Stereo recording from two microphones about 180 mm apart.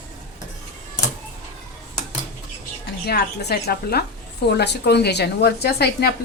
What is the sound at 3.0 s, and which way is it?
A woman's voice, 65° left (ahead or behind).